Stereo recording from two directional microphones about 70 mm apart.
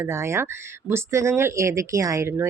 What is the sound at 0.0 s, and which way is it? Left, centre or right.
A woman's voice, right.